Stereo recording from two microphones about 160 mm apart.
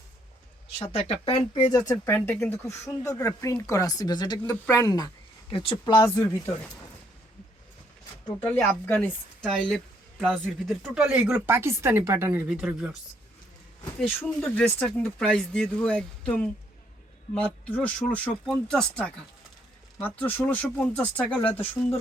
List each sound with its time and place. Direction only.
0.8 s speech: 35° left (ahead or behind)
2.1 s speech: 10° left (ahead or behind)
8.4 s speech: 10° left (ahead or behind)
9.4 s speech: centre (ahead or behind)
14.2 s speech: 5° left (ahead or behind)
21.4 s speech: 35° left (ahead or behind)